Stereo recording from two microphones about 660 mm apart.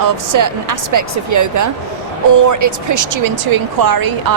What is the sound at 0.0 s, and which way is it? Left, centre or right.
Speech, right.